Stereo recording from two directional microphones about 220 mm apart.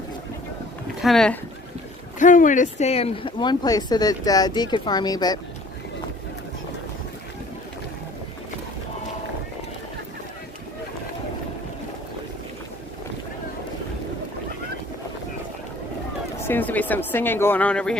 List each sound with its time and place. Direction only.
1.0 s speech: 5° left (ahead or behind)
2.1 s speech: 35° left (ahead or behind); by 5.4 s 20° left (ahead or behind)
16.4 s speech: 10° left (ahead or behind)